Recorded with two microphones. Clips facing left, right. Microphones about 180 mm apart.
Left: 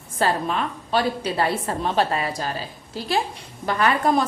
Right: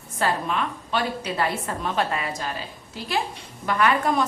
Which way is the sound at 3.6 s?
35° left (ahead or behind).